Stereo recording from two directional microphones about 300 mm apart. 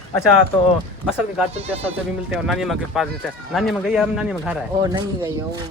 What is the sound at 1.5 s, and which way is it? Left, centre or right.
Speech, centre.